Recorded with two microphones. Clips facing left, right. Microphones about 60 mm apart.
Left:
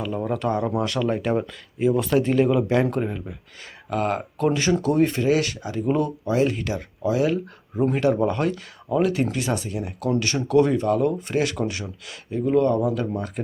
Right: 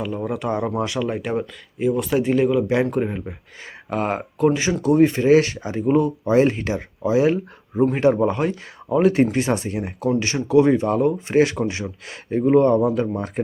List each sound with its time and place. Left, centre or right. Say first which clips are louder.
0.0 s speech: even; centre
3.0 s speech: right 3 dB; right
5.2 s speech: right 6 dB; right
5.8 s speech: right 4 dB; centre
6.2 s speech: right 5 dB; right
10.2 s speech: right 2 dB; right